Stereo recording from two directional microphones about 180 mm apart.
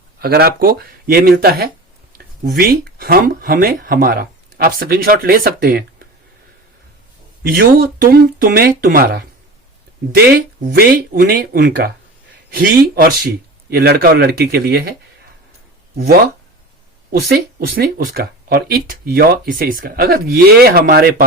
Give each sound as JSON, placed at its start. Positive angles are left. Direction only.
{"t": 0.2, "sound": "speech", "side_deg": -60}
{"t": 7.6, "sound": "speech", "side_deg": -55}
{"t": 16.0, "sound": "speech", "side_deg": -60}